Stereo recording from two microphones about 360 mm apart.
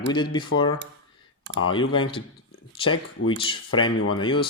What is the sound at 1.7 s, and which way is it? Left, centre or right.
Speech, centre.